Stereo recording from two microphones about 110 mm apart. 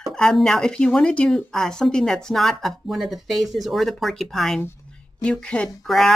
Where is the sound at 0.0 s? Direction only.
5° left (ahead or behind).